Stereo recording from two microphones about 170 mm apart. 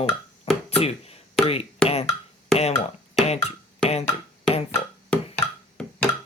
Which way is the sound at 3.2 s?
40° left (ahead or behind).